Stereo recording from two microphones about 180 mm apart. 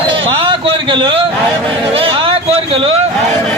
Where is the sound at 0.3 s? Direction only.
30° right (ahead or behind).